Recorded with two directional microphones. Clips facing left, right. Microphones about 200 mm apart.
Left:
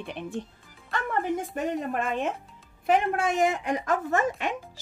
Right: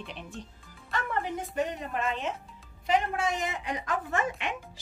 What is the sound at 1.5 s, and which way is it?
A woman's voice, 50° left (ahead or behind).